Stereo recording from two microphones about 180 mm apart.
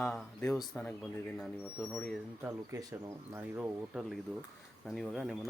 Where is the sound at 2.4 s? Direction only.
15° right (ahead or behind); by 5.3 s centre (ahead or behind).